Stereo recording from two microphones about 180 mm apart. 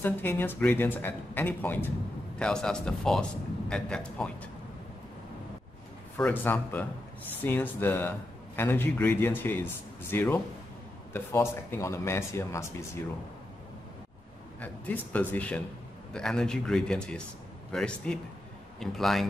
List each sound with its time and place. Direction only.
0.0 s a man's voice: 10° left (ahead or behind)
6.1 s speech: 10° left (ahead or behind)
14.6 s a man's voice: 10° left (ahead or behind)